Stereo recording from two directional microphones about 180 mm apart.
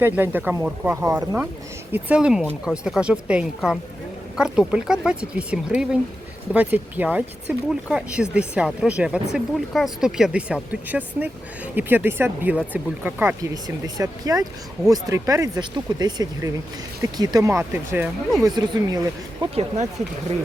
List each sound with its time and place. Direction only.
0.0 s speech: 10° right (ahead or behind)
19.5 s speech: 40° right (ahead or behind)